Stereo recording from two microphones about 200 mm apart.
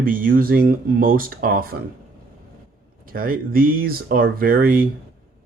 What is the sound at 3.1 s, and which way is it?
Speech, 45° right (ahead or behind).